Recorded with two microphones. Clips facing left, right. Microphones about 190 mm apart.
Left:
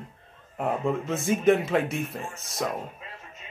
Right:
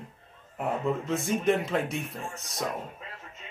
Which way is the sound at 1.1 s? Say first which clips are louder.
Left 5 dB; centre (ahead or behind).